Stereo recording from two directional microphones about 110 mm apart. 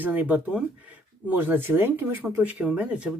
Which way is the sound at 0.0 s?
15° right (ahead or behind).